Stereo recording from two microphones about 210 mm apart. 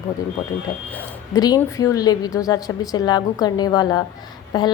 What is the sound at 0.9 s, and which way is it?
A woman's voice, 10° left (ahead or behind).